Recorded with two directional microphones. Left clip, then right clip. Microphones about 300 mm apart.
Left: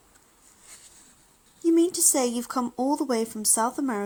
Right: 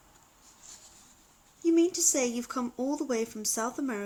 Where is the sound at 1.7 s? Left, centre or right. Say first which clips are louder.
Left 3 dB; left.